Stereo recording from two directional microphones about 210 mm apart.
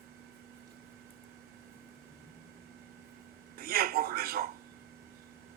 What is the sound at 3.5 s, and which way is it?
Speech, 45° right (ahead or behind).